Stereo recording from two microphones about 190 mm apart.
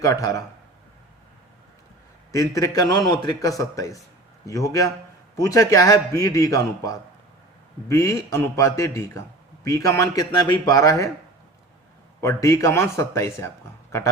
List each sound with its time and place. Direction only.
0.0 s a man's voice: 15° left (ahead or behind)
2.3 s a man's voice: 15° left (ahead or behind)
12.2 s a man's voice: 15° left (ahead or behind)